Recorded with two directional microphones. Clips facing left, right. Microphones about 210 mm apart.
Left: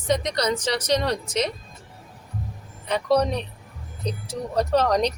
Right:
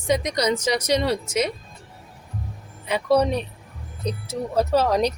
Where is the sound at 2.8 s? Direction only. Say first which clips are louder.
Right 1 dB; 10° right (ahead or behind).